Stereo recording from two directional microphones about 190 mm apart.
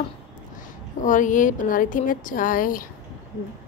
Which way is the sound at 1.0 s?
45° left (ahead or behind).